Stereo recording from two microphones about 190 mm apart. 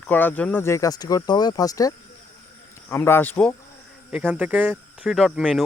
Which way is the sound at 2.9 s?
10° left (ahead or behind).